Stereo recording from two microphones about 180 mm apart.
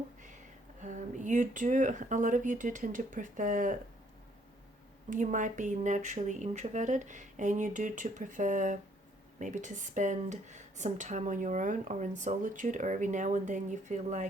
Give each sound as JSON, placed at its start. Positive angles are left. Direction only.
{"t": 0.8, "sound": "speech", "side_deg": -45}
{"t": 5.0, "sound": "speech", "side_deg": -45}